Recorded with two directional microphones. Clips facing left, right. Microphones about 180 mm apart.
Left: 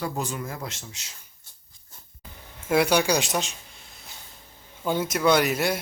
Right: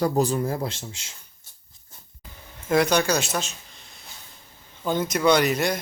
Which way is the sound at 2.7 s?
10° left (ahead or behind).